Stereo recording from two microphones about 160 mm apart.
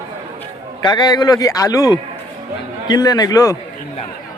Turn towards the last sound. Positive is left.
turn(degrees=20)  # may be behind; listen again after turning